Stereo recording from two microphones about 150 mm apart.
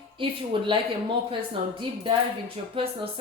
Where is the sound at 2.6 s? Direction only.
40° right (ahead or behind).